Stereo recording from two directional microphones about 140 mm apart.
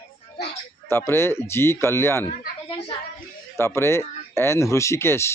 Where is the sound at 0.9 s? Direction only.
15° left (ahead or behind).